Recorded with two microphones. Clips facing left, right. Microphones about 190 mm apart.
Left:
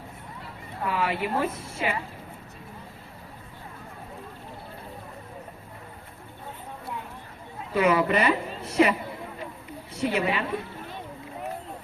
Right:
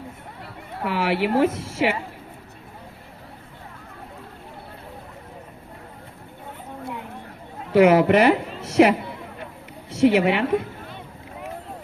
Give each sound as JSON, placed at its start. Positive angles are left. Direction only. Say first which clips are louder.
{"t": 0.9, "sound": "speech", "louder": "right 5 dB", "side_deg": -85}
{"t": 7.7, "sound": "a woman's voice", "louder": "right 8 dB", "side_deg": -80}